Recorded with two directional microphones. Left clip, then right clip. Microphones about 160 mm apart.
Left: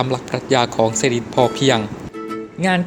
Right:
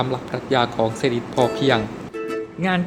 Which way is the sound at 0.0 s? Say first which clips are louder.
Left 3 dB; 45° left (ahead or behind).